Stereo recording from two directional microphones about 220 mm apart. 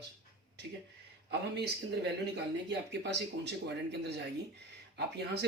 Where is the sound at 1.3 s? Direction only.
50° right (ahead or behind).